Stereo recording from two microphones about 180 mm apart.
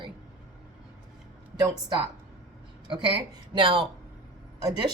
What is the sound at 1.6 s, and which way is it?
Speech, 20° right (ahead or behind).